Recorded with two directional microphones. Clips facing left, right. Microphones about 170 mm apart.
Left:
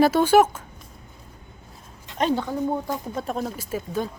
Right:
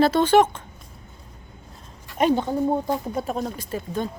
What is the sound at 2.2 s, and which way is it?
Speech, 15° right (ahead or behind).